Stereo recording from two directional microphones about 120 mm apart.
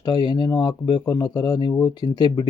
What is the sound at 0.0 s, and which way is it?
Speech, 35° left (ahead or behind).